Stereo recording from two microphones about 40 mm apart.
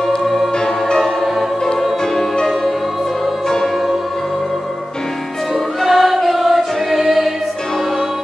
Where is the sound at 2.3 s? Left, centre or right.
Centre.